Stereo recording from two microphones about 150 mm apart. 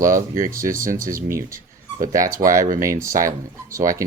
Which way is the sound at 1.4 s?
65° right (ahead or behind).